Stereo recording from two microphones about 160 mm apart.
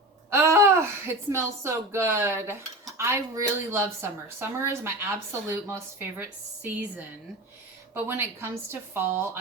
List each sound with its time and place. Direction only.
0.3 s speech: 15° right (ahead or behind)